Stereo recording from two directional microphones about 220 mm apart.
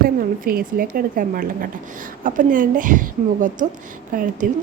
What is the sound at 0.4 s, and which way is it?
Speech, 40° right (ahead or behind).